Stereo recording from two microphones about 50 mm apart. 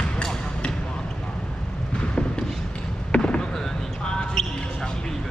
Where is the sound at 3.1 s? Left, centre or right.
Centre.